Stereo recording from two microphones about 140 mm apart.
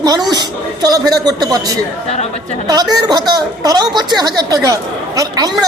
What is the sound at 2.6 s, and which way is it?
A woman's voice, 30° right (ahead or behind).